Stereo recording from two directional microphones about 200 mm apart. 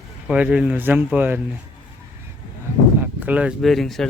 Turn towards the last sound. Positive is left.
turn(degrees=0)  # may be behind; listen again after turning